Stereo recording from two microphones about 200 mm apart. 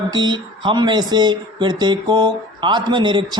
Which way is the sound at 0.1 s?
20° right (ahead or behind).